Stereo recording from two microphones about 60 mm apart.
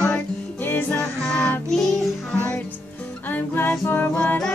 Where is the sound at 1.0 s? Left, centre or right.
Centre.